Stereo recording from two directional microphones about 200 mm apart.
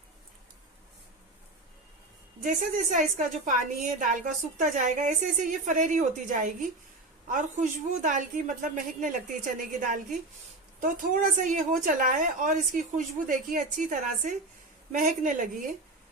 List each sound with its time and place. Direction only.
2.4 s a woman's voice: 40° right (ahead or behind)